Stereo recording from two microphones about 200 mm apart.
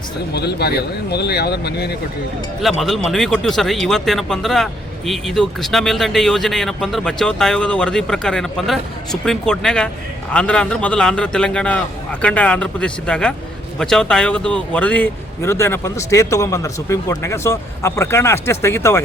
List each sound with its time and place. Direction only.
0.3 s speech: 55° left (ahead or behind)
2.6 s speech: centre (ahead or behind)